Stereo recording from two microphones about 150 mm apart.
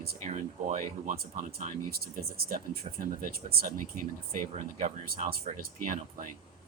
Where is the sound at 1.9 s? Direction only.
85° right.